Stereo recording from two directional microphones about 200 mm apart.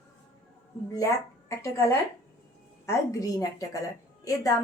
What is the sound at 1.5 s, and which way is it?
A woman's voice, 15° left (ahead or behind).